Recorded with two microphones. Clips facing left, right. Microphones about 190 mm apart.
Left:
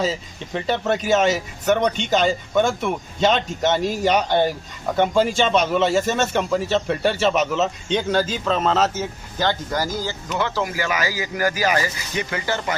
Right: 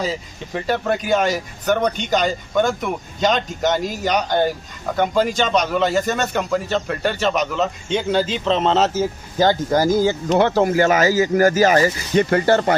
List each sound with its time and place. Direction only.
0.7 s a man's voice: centre (ahead or behind)
7.9 s speech: 10° right (ahead or behind)
8.4 s speech: 25° right (ahead or behind)
9.4 s speech: 45° right (ahead or behind)